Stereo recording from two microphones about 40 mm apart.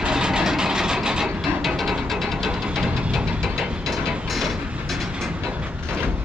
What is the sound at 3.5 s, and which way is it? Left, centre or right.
Mechanisms, centre.